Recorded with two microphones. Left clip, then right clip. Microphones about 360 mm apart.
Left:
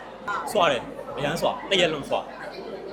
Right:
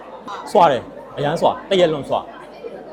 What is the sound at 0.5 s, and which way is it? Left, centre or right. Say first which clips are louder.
A man's voice: right 9 dB; right.